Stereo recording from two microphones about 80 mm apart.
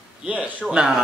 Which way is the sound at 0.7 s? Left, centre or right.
Centre.